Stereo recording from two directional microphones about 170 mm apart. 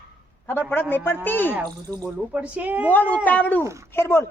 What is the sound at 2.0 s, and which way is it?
Speech, 10° right (ahead or behind).